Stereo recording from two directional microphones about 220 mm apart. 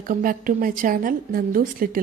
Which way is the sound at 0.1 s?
40° right (ahead or behind).